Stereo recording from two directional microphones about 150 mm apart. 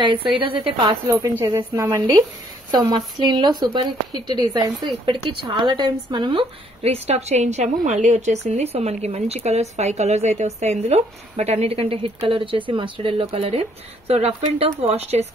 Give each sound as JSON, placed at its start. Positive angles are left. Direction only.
{"t": 0.4, "sound": "a woman's voice", "side_deg": -35}
{"t": 1.0, "sound": "speech", "side_deg": -20}
{"t": 2.7, "sound": "a woman's voice", "side_deg": -30}